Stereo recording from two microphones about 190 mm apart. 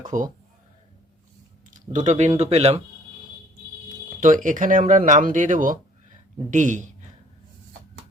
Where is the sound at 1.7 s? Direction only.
40° right (ahead or behind).